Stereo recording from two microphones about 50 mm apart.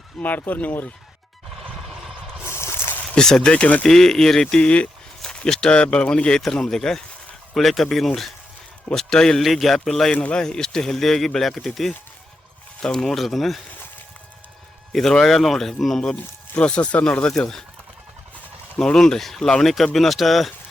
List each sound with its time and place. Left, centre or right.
0.2 s speech: left
2.4 s a sound: left
3.2 s speech: centre
3.8 s speech: centre
5.2 s speech: centre
6.4 s a man's voice: centre
9.4 s a man's voice: centre
10.1 s speech: left
10.3 s a man's voice: centre
14.9 s a man's voice: centre
16.6 s speech: left
17.3 s speech: centre
18.8 s a man's voice: centre